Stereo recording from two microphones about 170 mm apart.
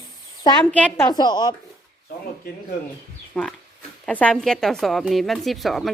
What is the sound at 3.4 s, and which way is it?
A woman's voice, 5° left (ahead or behind).